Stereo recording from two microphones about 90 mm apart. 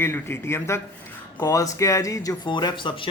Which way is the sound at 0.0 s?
25° left (ahead or behind).